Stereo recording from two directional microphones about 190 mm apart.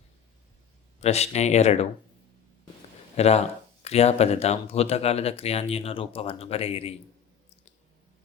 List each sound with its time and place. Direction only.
1.0 s speech: 35° left (ahead or behind)
3.2 s speech: 35° left (ahead or behind)